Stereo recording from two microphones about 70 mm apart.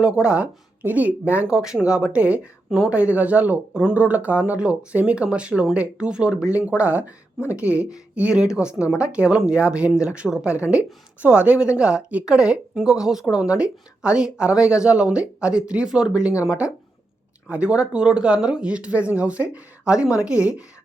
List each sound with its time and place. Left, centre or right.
0.0 s speech: centre